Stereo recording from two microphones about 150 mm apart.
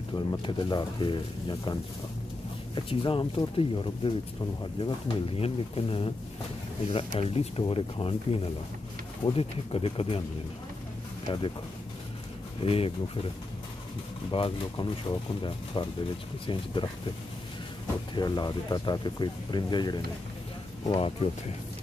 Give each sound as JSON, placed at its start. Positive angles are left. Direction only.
{"t": 0.1, "sound": "speech", "side_deg": 35}
{"t": 2.7, "sound": "speech", "side_deg": 35}
{"t": 7.2, "sound": "speech", "side_deg": 40}
{"t": 11.3, "sound": "speech", "side_deg": 35}
{"t": 12.6, "sound": "speech", "side_deg": 40}
{"t": 14.3, "sound": "speech", "side_deg": 35}
{"t": 18.1, "sound": "speech", "side_deg": 30}